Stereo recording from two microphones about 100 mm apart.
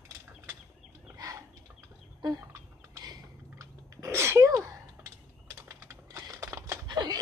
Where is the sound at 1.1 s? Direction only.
35° right (ahead or behind).